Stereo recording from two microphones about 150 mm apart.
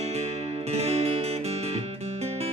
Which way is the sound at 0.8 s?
45° right (ahead or behind).